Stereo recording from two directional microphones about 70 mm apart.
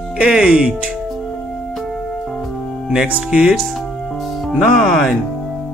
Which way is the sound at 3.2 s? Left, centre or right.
Centre.